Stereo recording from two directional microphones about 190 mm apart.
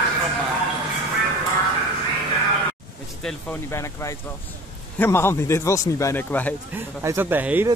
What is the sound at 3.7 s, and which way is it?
A man's voice, 15° left (ahead or behind).